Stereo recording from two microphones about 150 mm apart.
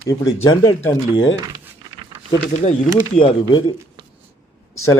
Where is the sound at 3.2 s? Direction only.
35° left (ahead or behind).